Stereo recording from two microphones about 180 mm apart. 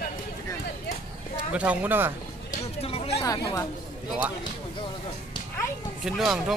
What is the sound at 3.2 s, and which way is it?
Speech, 20° left (ahead or behind).